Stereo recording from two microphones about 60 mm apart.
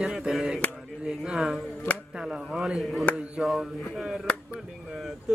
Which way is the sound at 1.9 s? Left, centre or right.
Left.